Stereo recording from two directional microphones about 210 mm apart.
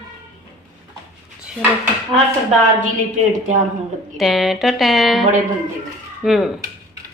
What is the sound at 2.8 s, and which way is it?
Speech, 35° right (ahead or behind).